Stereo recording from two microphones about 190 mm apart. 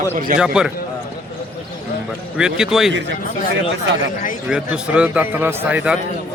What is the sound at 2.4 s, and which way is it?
Speech, 5° right (ahead or behind).